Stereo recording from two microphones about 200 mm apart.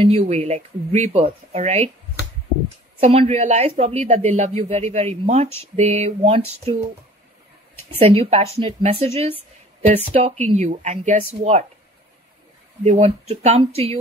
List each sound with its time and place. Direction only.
0.0 s a woman's voice: 30° right (ahead or behind)
3.0 s a woman's voice: 30° right (ahead or behind)
8.0 s a woman's voice: 30° right (ahead or behind)
12.8 s a woman's voice: 30° right (ahead or behind)